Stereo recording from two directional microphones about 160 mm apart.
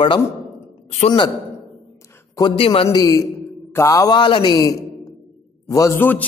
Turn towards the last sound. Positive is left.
turn(degrees=15)  # may be behind; listen again after turning